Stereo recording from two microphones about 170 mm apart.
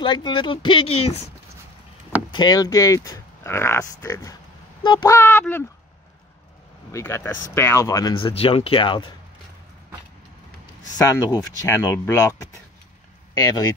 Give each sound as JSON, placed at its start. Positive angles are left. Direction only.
{"t": 0.0, "sound": "speech", "side_deg": 25}
{"t": 2.3, "sound": "speech", "side_deg": 25}
{"t": 4.8, "sound": "speech", "side_deg": 30}
{"t": 5.1, "sound": "speech", "side_deg": 15}
{"t": 6.9, "sound": "speech", "side_deg": 15}
{"t": 8.1, "sound": "speech", "side_deg": 30}
{"t": 11.0, "sound": "speech", "side_deg": 20}